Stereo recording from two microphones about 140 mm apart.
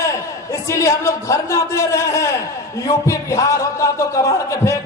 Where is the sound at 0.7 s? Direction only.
20° left (ahead or behind).